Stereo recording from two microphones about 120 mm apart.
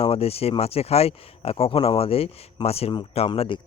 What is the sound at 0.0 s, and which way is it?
Speech, 55° left (ahead or behind).